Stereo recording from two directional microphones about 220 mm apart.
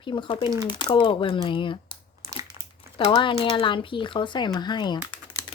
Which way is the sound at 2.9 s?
20° left (ahead or behind).